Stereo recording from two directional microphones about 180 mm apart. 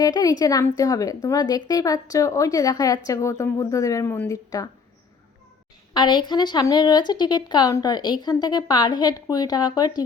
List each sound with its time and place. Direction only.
0.0 s a woman's voice: 20° left (ahead or behind)
5.9 s a woman's voice: 25° left (ahead or behind)